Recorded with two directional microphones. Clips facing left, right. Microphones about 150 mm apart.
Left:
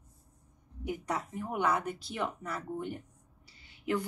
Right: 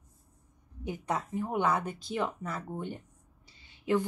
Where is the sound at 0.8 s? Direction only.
25° right (ahead or behind).